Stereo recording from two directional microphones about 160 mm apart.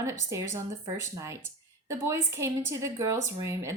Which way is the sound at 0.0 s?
20° right (ahead or behind).